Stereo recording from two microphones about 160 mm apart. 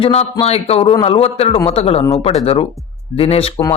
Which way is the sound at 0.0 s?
35° left (ahead or behind).